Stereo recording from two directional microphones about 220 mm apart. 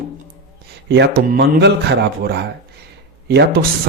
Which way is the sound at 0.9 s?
50° right (ahead or behind).